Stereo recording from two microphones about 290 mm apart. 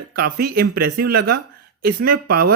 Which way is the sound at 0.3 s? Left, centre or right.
Right.